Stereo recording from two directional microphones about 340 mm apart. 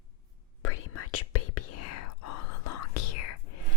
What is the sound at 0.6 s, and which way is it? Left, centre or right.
Whispering, left.